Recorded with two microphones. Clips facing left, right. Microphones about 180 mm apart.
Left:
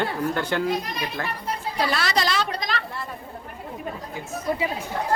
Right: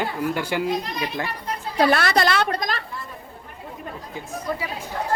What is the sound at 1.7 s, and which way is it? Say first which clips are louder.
A woman's voice: right 6 dB; 55° right (ahead or behind).